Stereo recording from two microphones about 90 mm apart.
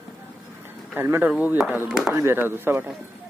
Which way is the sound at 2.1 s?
25° right (ahead or behind).